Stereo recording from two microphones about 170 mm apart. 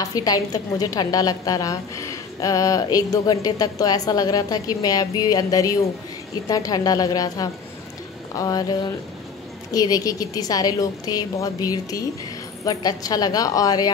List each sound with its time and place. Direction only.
0.0 s a woman's voice: 20° left (ahead or behind)